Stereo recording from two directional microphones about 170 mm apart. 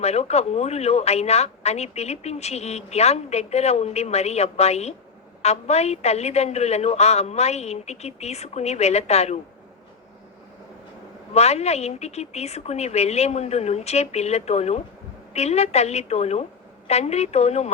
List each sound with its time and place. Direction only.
0.0 s a woman's voice: 40° left (ahead or behind)
11.3 s a woman's voice: 40° left (ahead or behind)